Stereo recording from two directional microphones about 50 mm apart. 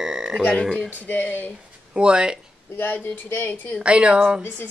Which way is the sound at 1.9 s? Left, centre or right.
Centre.